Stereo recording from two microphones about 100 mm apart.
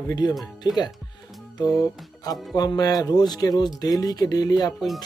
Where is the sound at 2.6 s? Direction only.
40° left (ahead or behind).